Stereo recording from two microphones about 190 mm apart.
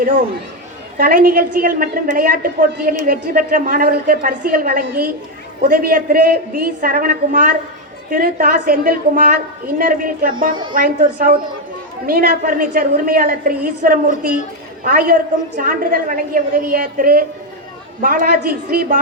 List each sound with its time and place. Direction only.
0.0 s a woman's voice: 45° right (ahead or behind)